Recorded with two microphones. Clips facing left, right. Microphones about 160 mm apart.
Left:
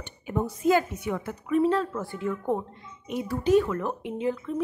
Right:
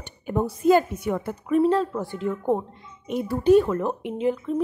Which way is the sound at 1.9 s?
20° right (ahead or behind).